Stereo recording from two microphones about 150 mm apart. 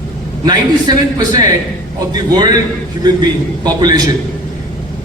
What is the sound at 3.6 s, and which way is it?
Speech, 25° right (ahead or behind).